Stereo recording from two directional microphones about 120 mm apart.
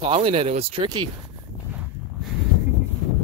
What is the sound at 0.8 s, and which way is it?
Speech, 35° right (ahead or behind).